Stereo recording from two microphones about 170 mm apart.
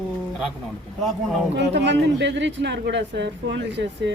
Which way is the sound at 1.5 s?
90° right.